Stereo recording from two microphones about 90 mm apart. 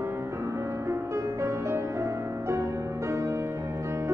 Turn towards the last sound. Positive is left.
turn(degrees=-30)  # may be behind; listen again after turning